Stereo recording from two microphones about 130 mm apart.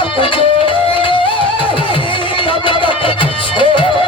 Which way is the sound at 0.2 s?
40° left (ahead or behind).